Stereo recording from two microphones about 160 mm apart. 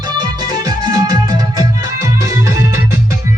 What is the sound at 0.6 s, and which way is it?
Music, 25° right (ahead or behind).